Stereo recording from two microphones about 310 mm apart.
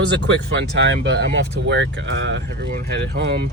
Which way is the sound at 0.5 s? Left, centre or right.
Right.